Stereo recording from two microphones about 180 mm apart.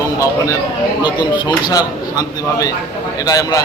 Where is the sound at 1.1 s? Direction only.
25° left (ahead or behind).